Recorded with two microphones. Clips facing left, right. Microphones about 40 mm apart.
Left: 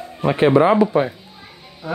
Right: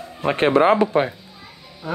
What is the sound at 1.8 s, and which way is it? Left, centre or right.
Speech, centre.